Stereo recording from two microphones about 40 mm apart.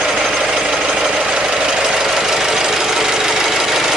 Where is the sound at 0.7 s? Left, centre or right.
Centre.